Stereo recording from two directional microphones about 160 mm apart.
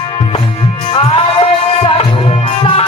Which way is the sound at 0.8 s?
35° left (ahead or behind).